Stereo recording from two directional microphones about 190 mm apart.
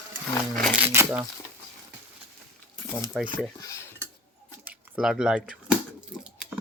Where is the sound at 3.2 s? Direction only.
20° left (ahead or behind).